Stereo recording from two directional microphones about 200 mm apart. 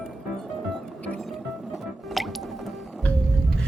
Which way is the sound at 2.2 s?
Centre (ahead or behind).